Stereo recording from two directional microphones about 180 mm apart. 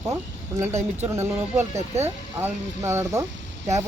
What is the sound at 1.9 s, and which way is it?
Speech, 35° right (ahead or behind).